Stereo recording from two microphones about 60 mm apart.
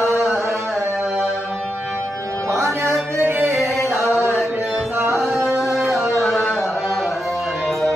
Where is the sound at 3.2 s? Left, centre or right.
Right.